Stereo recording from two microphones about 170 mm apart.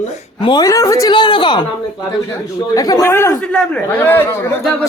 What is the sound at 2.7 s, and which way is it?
A woman's voice, 20° left (ahead or behind).